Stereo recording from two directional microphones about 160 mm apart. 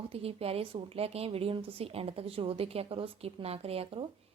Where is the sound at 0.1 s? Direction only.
40° right (ahead or behind).